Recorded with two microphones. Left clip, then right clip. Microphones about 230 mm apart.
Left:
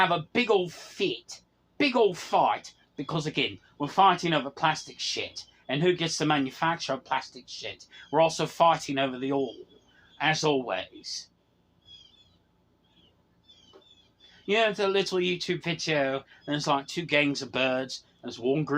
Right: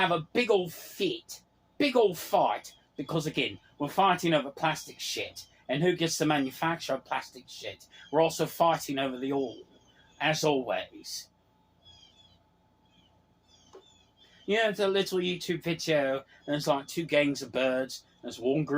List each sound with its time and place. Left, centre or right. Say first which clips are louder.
0.1 s speech: left 1 dB; left
14.4 s speech: left 2 dB; left